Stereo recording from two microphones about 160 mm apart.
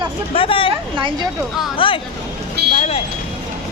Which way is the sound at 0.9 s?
30° right (ahead or behind).